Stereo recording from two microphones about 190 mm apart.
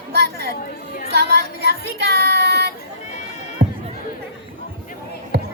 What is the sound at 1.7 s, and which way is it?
Child singing, 60° right (ahead or behind).